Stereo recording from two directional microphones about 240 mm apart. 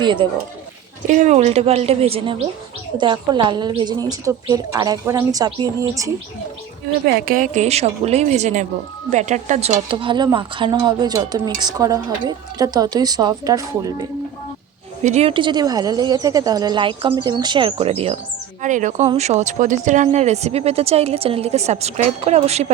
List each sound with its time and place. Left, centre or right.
0.0 s speech: centre
1.1 s a woman's voice: right
7.0 s a woman's voice: right; by 14.1 s centre
15.0 s speech: right